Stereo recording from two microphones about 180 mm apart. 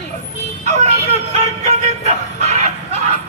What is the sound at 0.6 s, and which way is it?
Speech, 40° right (ahead or behind).